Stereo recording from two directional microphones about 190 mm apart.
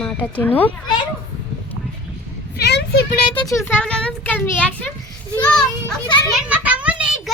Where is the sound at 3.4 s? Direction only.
15° left (ahead or behind).